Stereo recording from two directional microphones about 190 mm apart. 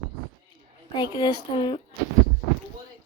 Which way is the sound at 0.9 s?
20° left (ahead or behind).